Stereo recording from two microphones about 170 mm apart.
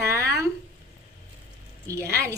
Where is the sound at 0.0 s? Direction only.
15° right (ahead or behind).